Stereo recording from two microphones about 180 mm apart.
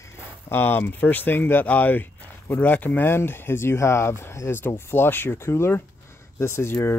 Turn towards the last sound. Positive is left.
turn(degrees=15)  # may be behind; listen again after turning